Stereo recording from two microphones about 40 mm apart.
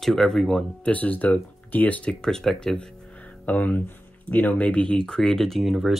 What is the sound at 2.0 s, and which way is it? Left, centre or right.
Speech, centre.